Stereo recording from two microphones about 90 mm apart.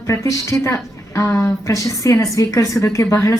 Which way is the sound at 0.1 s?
35° left (ahead or behind).